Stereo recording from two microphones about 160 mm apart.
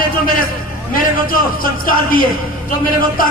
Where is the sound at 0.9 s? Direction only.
60° left (ahead or behind).